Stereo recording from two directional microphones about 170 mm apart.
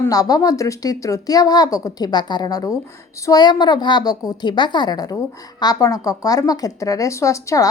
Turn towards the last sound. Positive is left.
turn(degrees=20)  # may be behind; listen again after turning